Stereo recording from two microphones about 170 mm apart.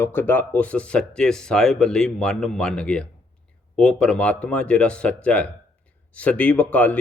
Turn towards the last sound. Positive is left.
turn(degrees=10)  # may be behind; listen again after turning